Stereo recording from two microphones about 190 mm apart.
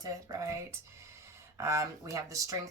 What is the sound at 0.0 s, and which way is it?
Speech, 20° right (ahead or behind).